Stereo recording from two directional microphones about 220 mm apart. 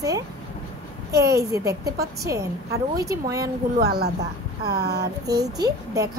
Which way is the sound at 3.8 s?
45° right (ahead or behind).